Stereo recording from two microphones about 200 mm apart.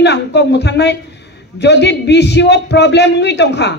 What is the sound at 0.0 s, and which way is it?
A man's voice, 60° left (ahead or behind).